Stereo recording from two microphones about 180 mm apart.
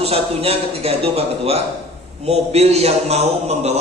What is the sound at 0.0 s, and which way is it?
A man's voice, 35° right (ahead or behind).